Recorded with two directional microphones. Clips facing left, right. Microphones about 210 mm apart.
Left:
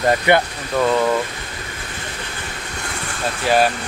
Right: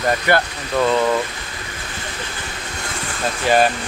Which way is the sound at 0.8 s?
10° left (ahead or behind).